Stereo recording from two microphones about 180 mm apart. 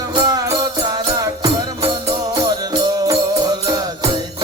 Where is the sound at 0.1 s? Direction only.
20° right (ahead or behind).